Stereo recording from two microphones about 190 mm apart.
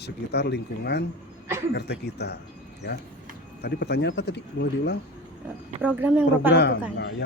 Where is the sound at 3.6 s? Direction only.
55° left (ahead or behind).